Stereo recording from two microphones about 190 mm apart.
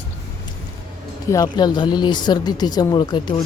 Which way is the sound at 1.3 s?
20° left (ahead or behind).